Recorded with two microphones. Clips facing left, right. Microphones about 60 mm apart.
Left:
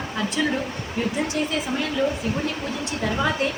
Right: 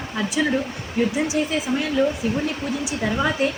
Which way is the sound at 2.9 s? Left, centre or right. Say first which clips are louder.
Right 1 dB; centre.